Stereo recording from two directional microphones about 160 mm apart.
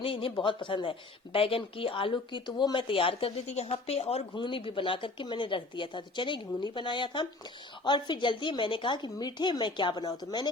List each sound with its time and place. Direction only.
0.0 s a woman's voice: 35° left (ahead or behind)